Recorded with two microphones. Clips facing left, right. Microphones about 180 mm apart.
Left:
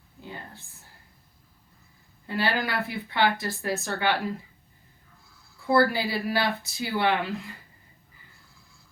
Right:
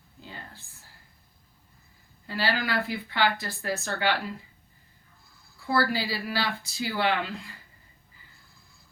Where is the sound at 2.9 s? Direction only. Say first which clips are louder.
Left 2 dB; 25° left (ahead or behind).